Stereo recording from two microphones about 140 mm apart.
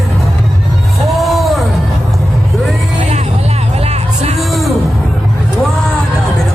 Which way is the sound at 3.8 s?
50° right (ahead or behind).